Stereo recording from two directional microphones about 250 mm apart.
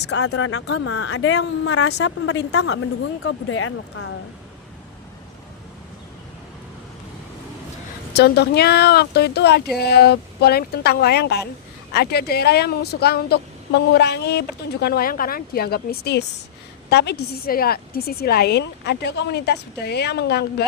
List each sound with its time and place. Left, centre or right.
0.1 s speech: left
8.1 s speech: left